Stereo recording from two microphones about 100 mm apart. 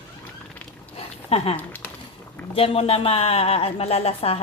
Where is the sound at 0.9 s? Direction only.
90° left.